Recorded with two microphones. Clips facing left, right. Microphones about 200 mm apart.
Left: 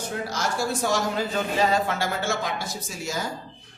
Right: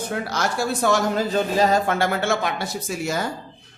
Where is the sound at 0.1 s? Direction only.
65° right (ahead or behind).